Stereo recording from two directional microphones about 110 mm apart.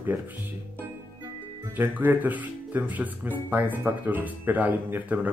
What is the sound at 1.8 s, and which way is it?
Speech, 15° right (ahead or behind).